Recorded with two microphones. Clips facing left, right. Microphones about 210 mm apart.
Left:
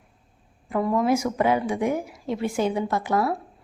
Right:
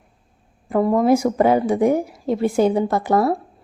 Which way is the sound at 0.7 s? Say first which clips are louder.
Right 6 dB; 40° right (ahead or behind).